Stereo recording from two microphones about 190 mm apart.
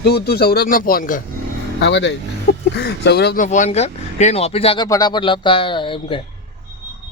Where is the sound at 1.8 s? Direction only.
70° left (ahead or behind).